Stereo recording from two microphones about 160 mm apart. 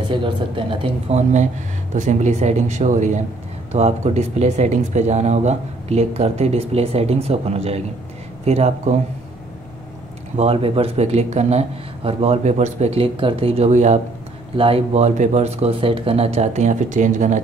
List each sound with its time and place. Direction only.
0.1 s speech: 30° right (ahead or behind)
10.3 s speech: 40° right (ahead or behind)
14.6 s speech: 35° right (ahead or behind)